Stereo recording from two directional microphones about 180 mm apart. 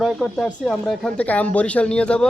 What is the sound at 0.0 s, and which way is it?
Speech, centre (ahead or behind).